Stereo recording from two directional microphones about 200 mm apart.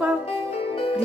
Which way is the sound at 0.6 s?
30° left (ahead or behind).